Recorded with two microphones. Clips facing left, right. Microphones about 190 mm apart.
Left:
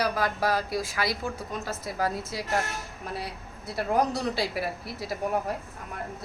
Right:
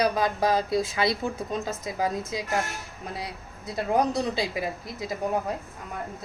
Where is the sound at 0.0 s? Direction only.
20° right (ahead or behind).